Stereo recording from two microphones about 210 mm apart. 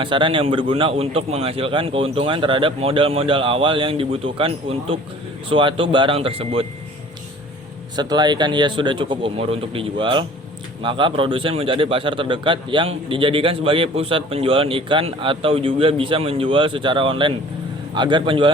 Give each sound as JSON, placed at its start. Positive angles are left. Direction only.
{"t": 0.0, "sound": "speech", "side_deg": -25}
{"t": 7.9, "sound": "speech", "side_deg": -20}